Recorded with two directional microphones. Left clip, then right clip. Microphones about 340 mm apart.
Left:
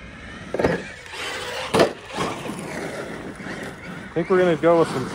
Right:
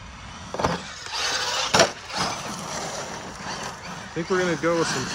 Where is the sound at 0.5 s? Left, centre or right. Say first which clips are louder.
Left 4 dB; centre.